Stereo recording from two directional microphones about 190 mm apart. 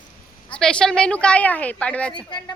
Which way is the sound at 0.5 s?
5° left (ahead or behind).